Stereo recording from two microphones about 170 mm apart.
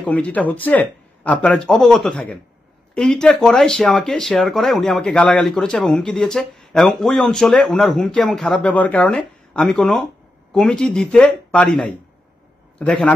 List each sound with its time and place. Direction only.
0.0 s a man's voice: 10° left (ahead or behind)